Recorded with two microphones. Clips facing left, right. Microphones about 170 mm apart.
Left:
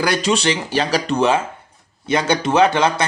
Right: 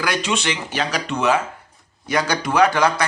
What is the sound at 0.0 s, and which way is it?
A man's voice, 35° left (ahead or behind).